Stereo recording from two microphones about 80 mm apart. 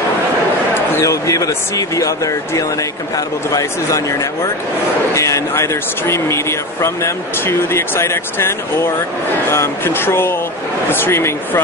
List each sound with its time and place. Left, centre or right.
1.0 s speech: left